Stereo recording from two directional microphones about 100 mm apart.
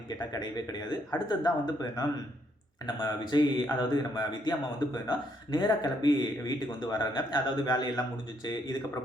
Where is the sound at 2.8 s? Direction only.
45° left (ahead or behind).